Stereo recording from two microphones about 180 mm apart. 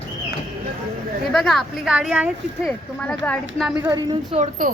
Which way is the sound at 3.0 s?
5° left (ahead or behind).